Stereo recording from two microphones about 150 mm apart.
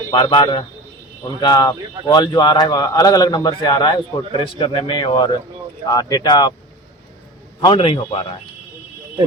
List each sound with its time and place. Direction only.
0.1 s speech: 30° left (ahead or behind)
7.6 s speech: 35° left (ahead or behind)